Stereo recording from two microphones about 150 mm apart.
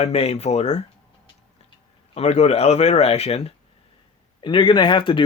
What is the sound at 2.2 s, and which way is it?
Speech, 50° left (ahead or behind).